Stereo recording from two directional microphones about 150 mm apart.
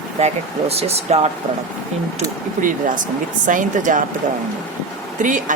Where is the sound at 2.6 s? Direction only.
60° right (ahead or behind).